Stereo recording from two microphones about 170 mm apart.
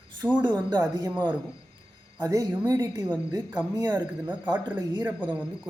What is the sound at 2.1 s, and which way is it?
Speech, 20° right (ahead or behind).